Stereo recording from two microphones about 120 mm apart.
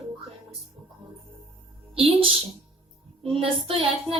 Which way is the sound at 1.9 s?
50° right (ahead or behind).